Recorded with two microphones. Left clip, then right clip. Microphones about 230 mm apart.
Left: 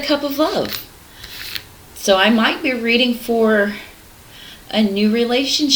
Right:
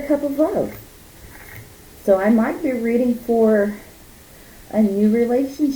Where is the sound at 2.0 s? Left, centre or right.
Centre.